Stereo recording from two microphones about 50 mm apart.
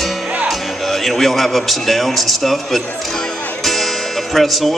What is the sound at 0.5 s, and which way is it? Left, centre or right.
A man's voice, centre.